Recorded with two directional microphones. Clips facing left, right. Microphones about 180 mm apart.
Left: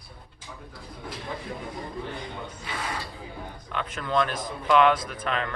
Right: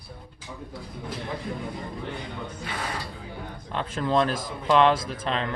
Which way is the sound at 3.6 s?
30° right (ahead or behind).